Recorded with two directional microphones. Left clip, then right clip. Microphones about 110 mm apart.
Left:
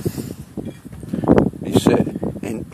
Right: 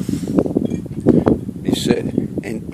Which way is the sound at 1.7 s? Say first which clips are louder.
Right 2 dB; 15° right (ahead or behind).